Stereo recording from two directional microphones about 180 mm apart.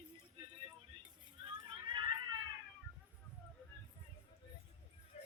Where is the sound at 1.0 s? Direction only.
25° right (ahead or behind).